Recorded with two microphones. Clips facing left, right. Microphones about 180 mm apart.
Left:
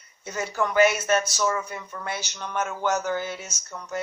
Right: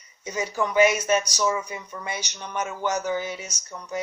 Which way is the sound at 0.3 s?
15° right (ahead or behind).